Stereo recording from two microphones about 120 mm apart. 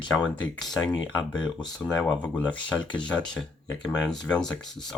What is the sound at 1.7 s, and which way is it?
Speech, 5° left (ahead or behind).